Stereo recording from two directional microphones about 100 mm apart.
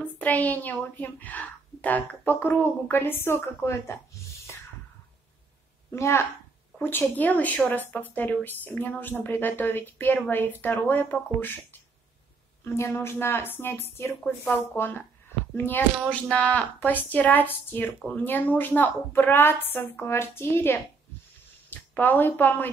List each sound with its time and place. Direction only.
0.0 s a woman's voice: 15° left (ahead or behind)
5.9 s a woman's voice: 25° left (ahead or behind)